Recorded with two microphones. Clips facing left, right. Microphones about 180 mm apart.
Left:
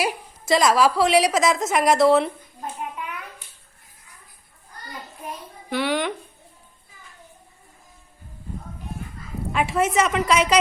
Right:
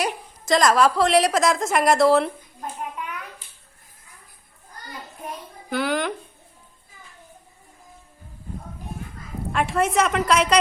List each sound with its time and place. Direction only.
0.0 s a woman's voice: 5° left (ahead or behind)
5.6 s a woman's voice: centre (ahead or behind)
9.5 s a woman's voice: centre (ahead or behind)